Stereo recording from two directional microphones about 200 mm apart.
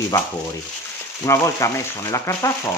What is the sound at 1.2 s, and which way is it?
Speech, 15° left (ahead or behind).